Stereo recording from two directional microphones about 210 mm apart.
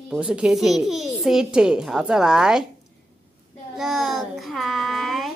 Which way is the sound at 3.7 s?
Centre (ahead or behind).